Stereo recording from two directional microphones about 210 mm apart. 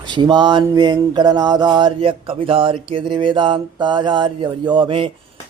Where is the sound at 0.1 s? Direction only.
20° right (ahead or behind).